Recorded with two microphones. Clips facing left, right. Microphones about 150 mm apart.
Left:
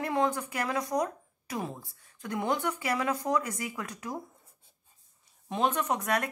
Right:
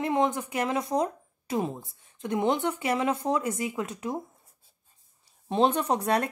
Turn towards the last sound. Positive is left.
turn(degrees=-30)  # may be behind; listen again after turning